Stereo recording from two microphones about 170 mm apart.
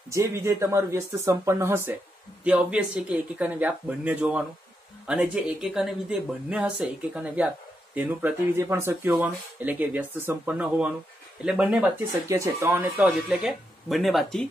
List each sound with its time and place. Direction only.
0.1 s speech: 15° right (ahead or behind); by 14.5 s centre (ahead or behind)